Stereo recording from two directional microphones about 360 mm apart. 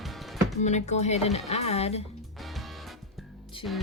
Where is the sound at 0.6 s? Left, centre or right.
Centre.